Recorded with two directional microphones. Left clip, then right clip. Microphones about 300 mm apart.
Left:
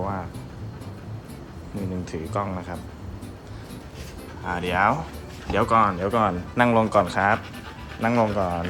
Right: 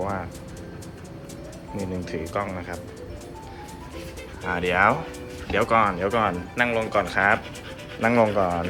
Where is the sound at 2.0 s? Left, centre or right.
Centre.